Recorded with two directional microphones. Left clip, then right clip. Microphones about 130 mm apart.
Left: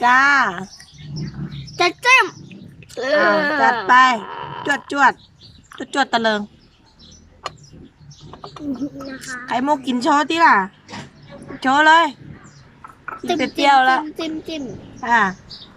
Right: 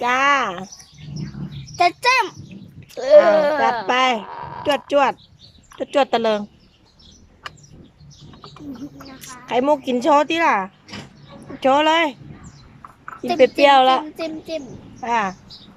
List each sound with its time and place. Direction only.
0.0 s speech: 15° right (ahead or behind)
1.7 s a sound: 10° right (ahead or behind)
2.9 s speech: 10° right (ahead or behind)
9.1 s speech: 20° right (ahead or behind)
13.2 s speech: 15° right (ahead or behind)